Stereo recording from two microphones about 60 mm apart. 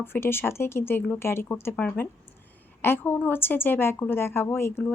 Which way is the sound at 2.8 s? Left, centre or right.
Left.